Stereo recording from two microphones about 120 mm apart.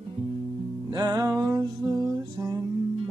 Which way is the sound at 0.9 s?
35° right (ahead or behind).